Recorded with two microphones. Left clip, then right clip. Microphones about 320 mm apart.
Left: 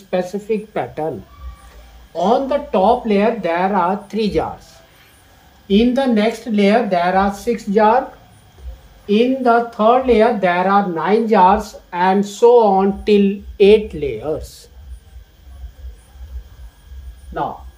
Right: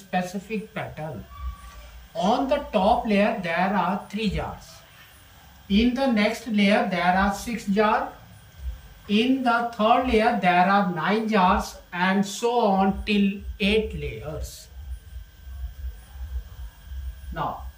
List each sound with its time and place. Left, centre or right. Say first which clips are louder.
0.1 s speech: left 9 dB; centre
2.2 s speech: left 7 dB; centre
5.8 s speech: left 7 dB; centre
9.0 s speech: left 8 dB; centre